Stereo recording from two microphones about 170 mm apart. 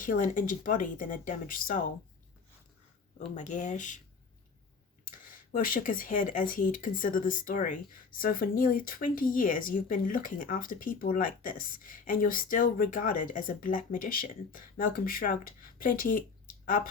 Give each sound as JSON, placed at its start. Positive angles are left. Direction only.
{"t": 0.0, "sound": "speech", "side_deg": 50}
{"t": 3.2, "sound": "speech", "side_deg": 45}
{"t": 5.0, "sound": "speech", "side_deg": 55}